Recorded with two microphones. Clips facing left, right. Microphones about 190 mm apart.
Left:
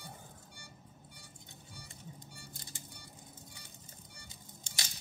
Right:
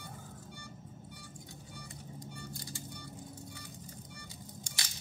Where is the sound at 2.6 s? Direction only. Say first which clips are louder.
Right 7 dB; 20° left (ahead or behind).